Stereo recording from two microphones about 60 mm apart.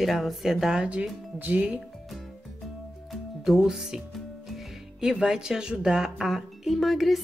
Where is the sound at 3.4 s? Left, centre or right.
Centre.